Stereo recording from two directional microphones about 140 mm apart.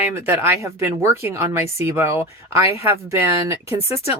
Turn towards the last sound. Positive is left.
turn(degrees=-20)  # may be behind; listen again after turning